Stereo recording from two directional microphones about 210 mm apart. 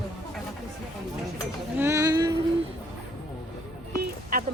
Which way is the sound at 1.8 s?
15° right (ahead or behind).